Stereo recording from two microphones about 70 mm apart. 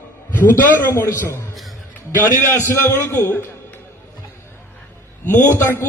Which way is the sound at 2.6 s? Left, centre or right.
Left.